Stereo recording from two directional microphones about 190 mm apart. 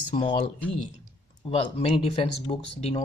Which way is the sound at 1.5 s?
30° left (ahead or behind).